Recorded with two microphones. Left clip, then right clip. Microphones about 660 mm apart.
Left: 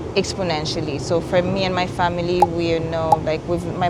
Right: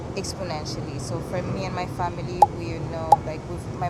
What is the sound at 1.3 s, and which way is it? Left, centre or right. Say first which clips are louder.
Speech: left 9 dB; left.